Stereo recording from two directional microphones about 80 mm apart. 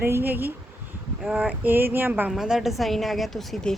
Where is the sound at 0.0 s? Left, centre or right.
Right.